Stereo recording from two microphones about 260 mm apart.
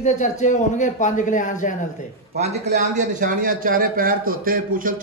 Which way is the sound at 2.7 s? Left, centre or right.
Right.